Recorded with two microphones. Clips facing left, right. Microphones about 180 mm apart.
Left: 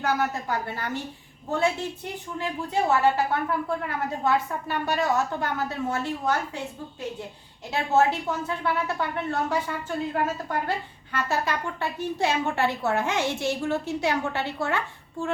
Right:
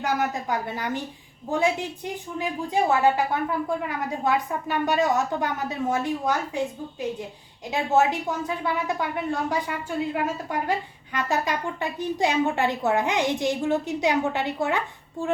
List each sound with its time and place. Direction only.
0.0 s a woman's voice: 15° right (ahead or behind)
7.7 s a woman's voice: 15° right (ahead or behind)